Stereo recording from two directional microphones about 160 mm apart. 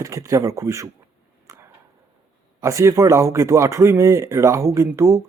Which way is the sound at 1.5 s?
20° right (ahead or behind).